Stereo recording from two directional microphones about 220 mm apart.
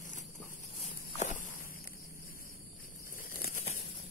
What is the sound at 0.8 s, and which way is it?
Walk, 35° left (ahead or behind).